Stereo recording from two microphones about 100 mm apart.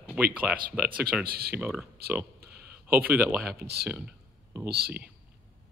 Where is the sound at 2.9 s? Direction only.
20° right (ahead or behind).